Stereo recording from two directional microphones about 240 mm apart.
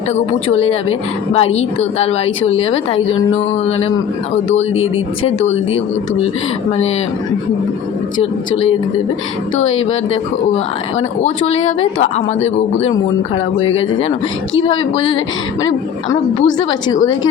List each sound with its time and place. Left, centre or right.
0.4 s speech: left
6.7 s speech: left
11.5 s a woman's voice: left
12.0 s speech: left
16.4 s speech: left